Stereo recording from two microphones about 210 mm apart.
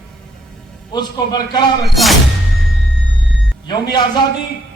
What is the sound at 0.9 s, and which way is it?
Speech, 20° left (ahead or behind).